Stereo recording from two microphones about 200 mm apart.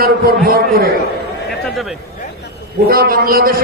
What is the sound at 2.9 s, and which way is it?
Speech, 50° right (ahead or behind).